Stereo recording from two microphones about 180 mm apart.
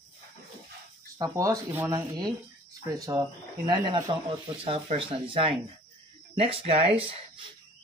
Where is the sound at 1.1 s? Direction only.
20° right (ahead or behind).